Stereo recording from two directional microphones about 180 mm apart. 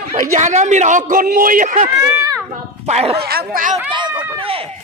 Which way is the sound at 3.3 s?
55° right (ahead or behind).